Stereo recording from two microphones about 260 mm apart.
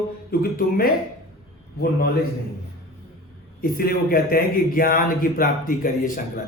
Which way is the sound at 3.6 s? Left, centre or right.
Left.